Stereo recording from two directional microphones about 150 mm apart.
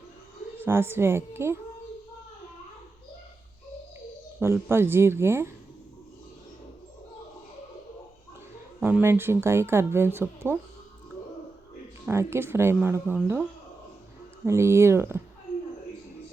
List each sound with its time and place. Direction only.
0.6 s speech: 15° right (ahead or behind)
4.4 s speech: 15° right (ahead or behind)
8.8 s speech: 15° right (ahead or behind)
12.0 s speech: 15° right (ahead or behind)
14.4 s speech: 20° right (ahead or behind)